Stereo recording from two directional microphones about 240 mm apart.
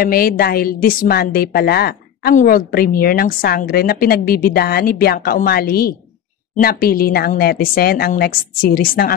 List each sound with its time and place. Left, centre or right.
0.0 s a woman's voice: left